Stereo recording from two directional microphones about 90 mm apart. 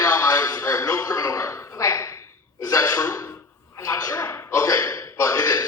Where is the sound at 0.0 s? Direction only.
40° left (ahead or behind).